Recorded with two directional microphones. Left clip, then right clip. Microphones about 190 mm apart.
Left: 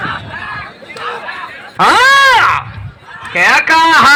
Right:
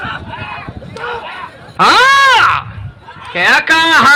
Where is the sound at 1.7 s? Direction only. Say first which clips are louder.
Even; 35° left (ahead or behind).